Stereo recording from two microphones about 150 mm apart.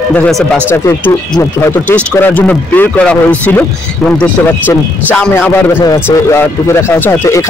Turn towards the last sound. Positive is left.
turn(degrees=20)  # may be behind; listen again after turning